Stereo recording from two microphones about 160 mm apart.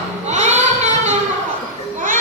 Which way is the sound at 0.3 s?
45° right (ahead or behind).